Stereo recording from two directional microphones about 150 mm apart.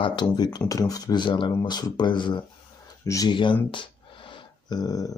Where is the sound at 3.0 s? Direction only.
25° left (ahead or behind).